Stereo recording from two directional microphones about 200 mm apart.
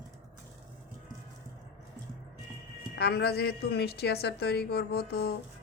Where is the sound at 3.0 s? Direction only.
55° left (ahead or behind).